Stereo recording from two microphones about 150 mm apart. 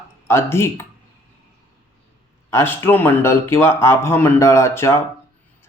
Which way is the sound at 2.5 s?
15° left (ahead or behind).